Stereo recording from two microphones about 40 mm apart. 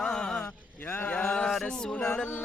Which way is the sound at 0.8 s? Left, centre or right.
Left.